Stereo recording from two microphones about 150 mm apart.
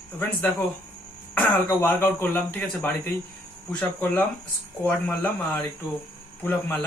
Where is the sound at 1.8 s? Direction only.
15° left (ahead or behind).